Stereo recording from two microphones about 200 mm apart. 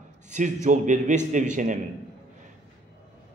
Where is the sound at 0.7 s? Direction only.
40° right (ahead or behind).